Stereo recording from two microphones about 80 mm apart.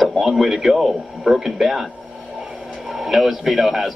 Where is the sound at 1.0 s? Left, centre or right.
Centre.